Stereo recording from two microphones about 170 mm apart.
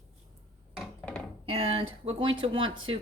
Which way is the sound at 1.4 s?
35° right (ahead or behind).